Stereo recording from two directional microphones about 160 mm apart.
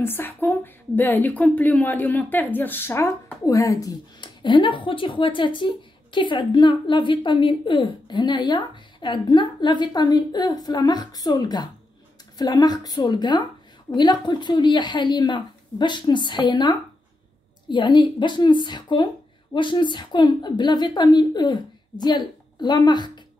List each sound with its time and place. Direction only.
0.0 s a woman's voice: 15° left (ahead or behind)